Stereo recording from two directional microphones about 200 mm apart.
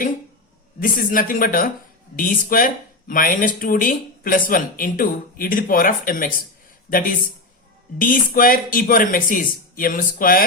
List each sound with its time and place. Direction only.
0.8 s speech: 45° left (ahead or behind)
7.9 s speech: 45° left (ahead or behind)